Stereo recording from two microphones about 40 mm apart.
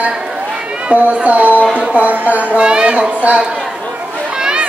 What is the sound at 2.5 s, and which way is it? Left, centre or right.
Speech, right.